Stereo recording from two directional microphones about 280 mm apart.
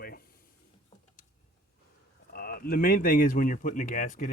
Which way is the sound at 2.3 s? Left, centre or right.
Left.